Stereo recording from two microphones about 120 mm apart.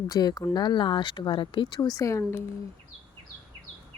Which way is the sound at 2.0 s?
25° left (ahead or behind).